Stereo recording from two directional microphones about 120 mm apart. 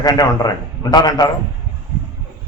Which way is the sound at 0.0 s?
35° left (ahead or behind).